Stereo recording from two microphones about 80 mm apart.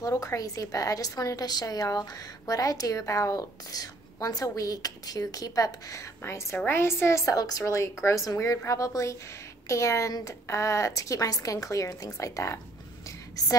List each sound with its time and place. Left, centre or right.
0.0 s a woman's voice: left
7.3 s a woman's voice: left